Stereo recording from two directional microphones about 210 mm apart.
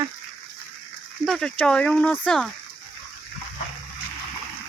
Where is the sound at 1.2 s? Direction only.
Centre (ahead or behind).